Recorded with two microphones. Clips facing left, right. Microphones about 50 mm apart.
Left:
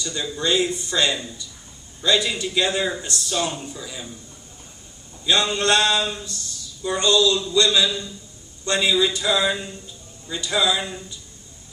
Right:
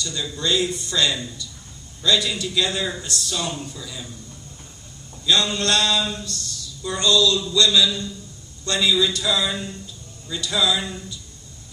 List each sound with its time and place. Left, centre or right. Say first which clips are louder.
0.0 s speech: left 1 dB; left
5.2 s speech: even; left